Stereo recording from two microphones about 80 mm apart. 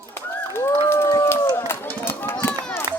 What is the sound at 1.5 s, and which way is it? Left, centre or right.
Run, left.